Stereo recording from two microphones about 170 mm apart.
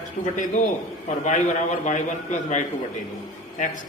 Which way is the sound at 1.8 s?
45° left (ahead or behind).